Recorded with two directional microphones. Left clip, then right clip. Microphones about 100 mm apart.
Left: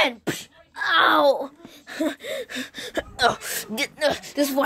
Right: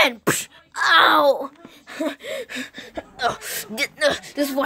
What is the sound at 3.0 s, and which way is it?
Speech, 85° left.